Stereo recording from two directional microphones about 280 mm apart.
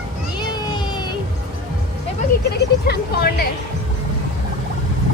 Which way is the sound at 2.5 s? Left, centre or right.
Left.